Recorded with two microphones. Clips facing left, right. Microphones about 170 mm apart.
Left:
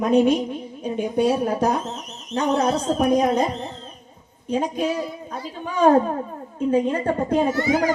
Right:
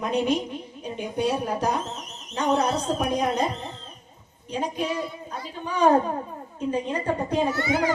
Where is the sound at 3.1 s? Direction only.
45° left (ahead or behind).